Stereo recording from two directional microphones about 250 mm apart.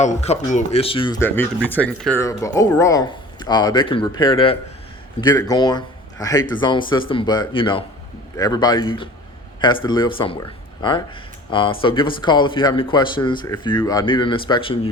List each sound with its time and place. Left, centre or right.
0.0 s a man's voice: left